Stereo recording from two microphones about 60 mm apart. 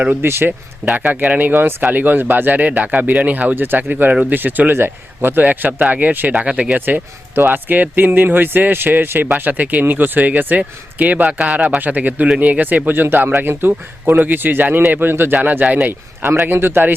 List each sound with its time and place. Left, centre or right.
0.2 s a man's voice: right
0.9 s speech: right
6.7 s a man's voice: right
15.6 s speech: right
15.9 s a man's voice: right